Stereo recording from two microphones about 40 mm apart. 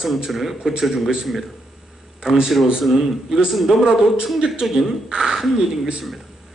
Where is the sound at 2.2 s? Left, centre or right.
Centre.